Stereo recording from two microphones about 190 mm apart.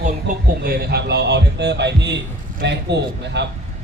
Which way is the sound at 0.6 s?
55° right (ahead or behind).